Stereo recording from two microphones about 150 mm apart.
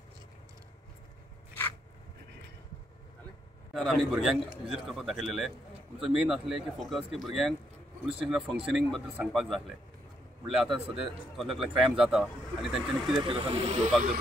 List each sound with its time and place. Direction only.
3.7 s a man's voice: centre (ahead or behind)
13.2 s speech: 35° right (ahead or behind)